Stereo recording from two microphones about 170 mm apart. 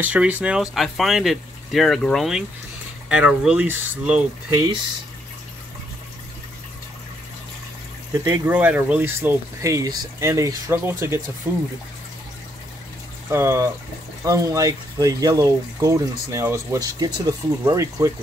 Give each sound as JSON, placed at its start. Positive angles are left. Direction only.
{"t": 0.0, "sound": "speech", "side_deg": -10}
{"t": 8.1, "sound": "speech", "side_deg": -25}
{"t": 8.5, "sound": "speech", "side_deg": -10}
{"t": 13.3, "sound": "speech", "side_deg": -15}